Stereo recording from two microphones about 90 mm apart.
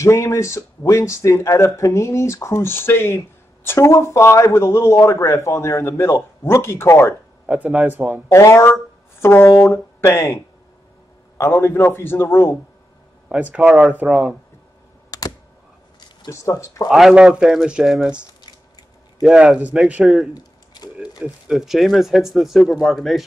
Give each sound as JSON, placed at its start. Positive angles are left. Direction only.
{"t": 0.0, "sound": "a man's voice", "side_deg": 35}
{"t": 7.4, "sound": "a man's voice", "side_deg": -15}
{"t": 8.3, "sound": "a man's voice", "side_deg": 30}
{"t": 13.3, "sound": "a man's voice", "side_deg": -15}
{"t": 15.0, "sound": "computer keyboard", "side_deg": 40}
{"t": 16.3, "sound": "a man's voice", "side_deg": 35}
{"t": 16.9, "sound": "a man's voice", "side_deg": -5}
{"t": 18.4, "sound": "a sound", "side_deg": 50}
{"t": 19.2, "sound": "a man's voice", "side_deg": -10}
{"t": 21.5, "sound": "speech", "side_deg": -5}